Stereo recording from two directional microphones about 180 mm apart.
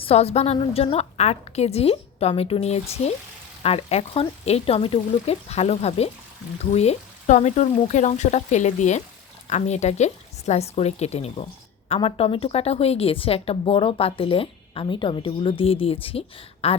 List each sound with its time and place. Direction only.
0.0 s a woman's voice: 35° left (ahead or behind)